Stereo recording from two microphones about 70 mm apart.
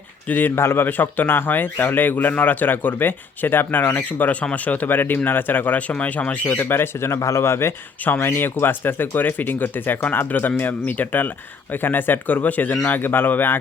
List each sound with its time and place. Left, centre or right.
0.3 s speech: left
0.5 s speech: left
8.0 s speech: left